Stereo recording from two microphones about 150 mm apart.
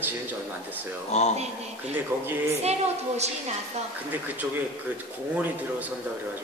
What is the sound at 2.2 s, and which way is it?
Speech, 15° right (ahead or behind).